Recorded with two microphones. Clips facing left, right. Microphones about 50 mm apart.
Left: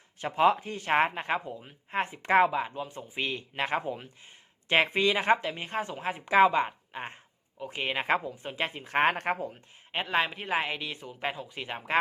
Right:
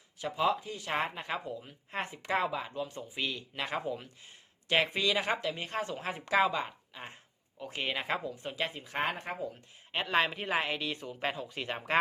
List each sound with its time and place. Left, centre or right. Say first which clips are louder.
0.2 s speech: left 6 dB; left
7.6 s speech: left 3 dB; centre
7.9 s speech: left 6 dB; left
9.1 s speech: left 9 dB; left
9.9 s speech: left 1 dB; centre